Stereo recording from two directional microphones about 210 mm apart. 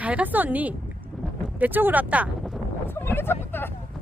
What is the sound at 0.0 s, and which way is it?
Speech, 5° right (ahead or behind).